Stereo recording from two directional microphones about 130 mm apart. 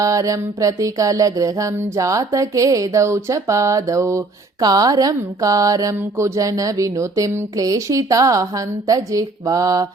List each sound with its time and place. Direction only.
0.0 s music: 25° right (ahead or behind)